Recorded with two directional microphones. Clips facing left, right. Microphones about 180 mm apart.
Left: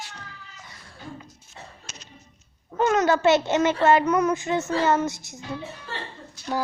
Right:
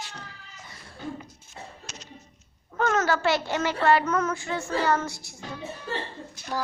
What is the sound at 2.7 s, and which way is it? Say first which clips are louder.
A child's voice: left 4 dB; 15° left (ahead or behind).